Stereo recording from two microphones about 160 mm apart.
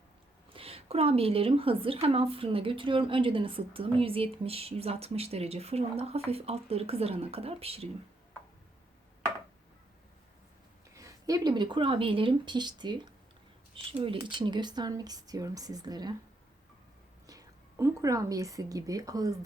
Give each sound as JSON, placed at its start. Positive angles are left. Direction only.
{"t": 0.5, "sound": "speech", "side_deg": -35}
{"t": 10.9, "sound": "speech", "side_deg": -20}
{"t": 17.2, "sound": "a woman's voice", "side_deg": -20}